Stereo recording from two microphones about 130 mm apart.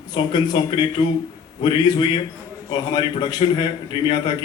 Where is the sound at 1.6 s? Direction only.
35° left (ahead or behind).